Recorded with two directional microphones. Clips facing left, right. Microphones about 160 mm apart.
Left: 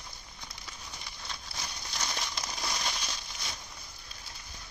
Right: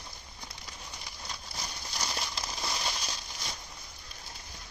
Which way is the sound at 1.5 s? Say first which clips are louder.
Right 1 dB; 5° right (ahead or behind).